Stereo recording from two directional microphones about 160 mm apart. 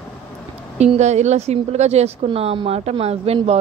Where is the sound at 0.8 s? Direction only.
45° right (ahead or behind).